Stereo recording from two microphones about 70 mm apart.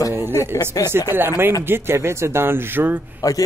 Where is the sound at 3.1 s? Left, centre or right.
Left.